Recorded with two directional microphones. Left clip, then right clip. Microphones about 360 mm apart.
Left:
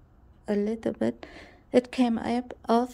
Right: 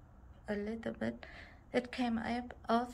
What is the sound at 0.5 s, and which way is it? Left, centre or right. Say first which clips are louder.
A woman's voice: left 11 dB; centre.